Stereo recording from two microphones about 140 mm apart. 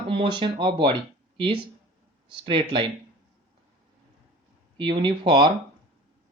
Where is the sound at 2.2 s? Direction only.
35° right (ahead or behind).